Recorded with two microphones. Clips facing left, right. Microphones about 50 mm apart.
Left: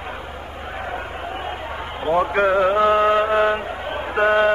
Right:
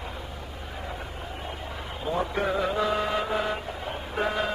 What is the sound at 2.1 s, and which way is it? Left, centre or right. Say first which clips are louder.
Music: left 10 dB; left.